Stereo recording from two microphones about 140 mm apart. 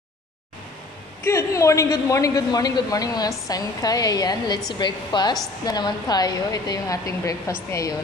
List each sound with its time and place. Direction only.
1.2 s a woman's voice: 20° left (ahead or behind)